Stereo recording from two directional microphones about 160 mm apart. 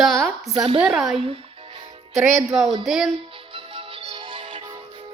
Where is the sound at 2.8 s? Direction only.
Centre (ahead or behind).